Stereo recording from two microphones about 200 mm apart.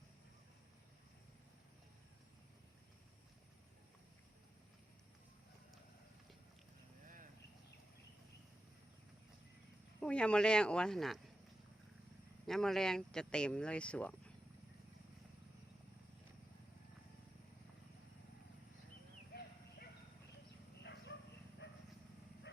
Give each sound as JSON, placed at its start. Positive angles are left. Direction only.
{"t": 10.0, "sound": "speech", "side_deg": 5}
{"t": 12.5, "sound": "speech", "side_deg": 0}
{"t": 19.3, "sound": "a sound", "side_deg": 50}